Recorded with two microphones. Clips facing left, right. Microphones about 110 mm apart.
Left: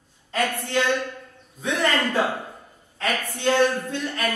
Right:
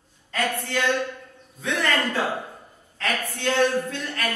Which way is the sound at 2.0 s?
15° left (ahead or behind).